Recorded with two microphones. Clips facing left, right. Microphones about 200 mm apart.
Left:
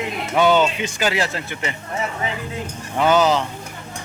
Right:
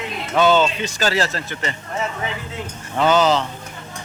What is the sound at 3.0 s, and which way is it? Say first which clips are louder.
Speech: even; 10° left (ahead or behind).